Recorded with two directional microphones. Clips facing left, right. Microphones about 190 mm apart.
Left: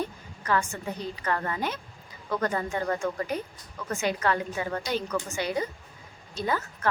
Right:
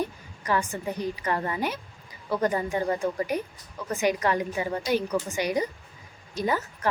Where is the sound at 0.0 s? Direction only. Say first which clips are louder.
Right 2 dB; 15° right (ahead or behind).